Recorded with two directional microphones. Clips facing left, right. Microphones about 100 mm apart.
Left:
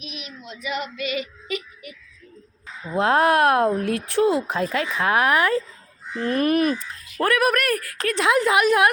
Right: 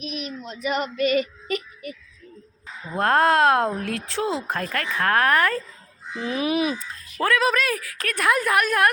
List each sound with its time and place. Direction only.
0.0 s child singing: 40° right (ahead or behind)
2.9 s speech: 10° left (ahead or behind)
6.1 s speech: 5° right (ahead or behind)
7.2 s speech: 10° left (ahead or behind)
8.1 s a woman's voice: 20° left (ahead or behind)